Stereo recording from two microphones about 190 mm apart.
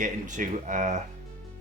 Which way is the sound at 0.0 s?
40° right (ahead or behind).